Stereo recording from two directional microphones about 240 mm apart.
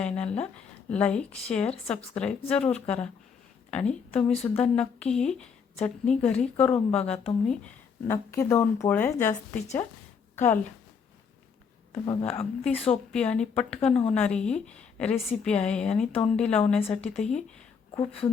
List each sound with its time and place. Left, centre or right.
0.0 s a woman's voice: centre
4.4 s a woman's voice: centre
11.9 s a woman's voice: centre
17.9 s speech: left